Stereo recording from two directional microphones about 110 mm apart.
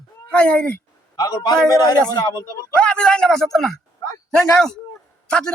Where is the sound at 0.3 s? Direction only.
10° left (ahead or behind).